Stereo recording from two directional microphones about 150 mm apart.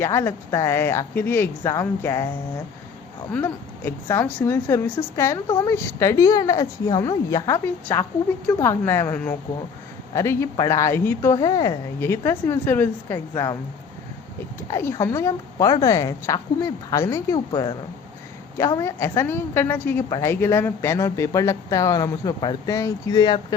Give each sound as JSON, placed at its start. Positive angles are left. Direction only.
{"t": 0.0, "sound": "speech", "side_deg": 15}
{"t": 3.3, "sound": "a woman's voice", "side_deg": 15}
{"t": 11.9, "sound": "speech", "side_deg": 15}
{"t": 14.7, "sound": "a woman's voice", "side_deg": 20}